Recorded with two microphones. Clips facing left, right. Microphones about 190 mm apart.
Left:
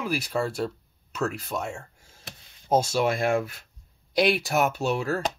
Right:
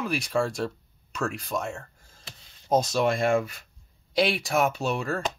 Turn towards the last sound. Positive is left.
turn(degrees=5)  # may be behind; listen again after turning